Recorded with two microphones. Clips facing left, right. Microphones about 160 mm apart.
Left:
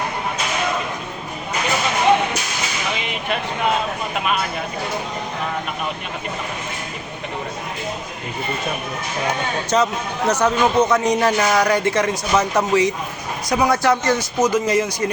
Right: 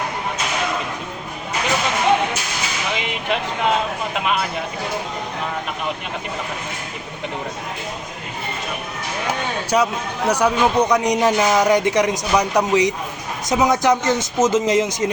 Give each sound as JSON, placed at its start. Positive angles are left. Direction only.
{"t": 9.6, "sound": "a man's voice", "side_deg": -10}